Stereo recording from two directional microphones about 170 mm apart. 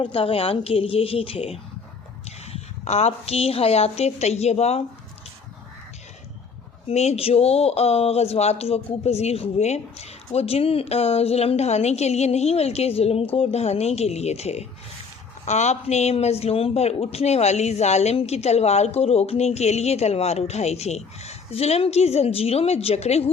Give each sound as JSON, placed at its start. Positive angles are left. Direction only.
{"t": 0.0, "sound": "speech", "side_deg": 35}
{"t": 6.8, "sound": "speech", "side_deg": 40}